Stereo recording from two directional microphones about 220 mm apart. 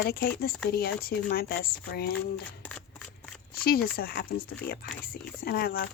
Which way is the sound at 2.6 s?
5° left (ahead or behind).